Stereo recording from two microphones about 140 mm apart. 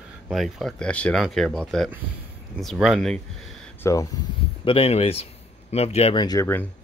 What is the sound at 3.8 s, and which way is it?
Speech, 25° left (ahead or behind).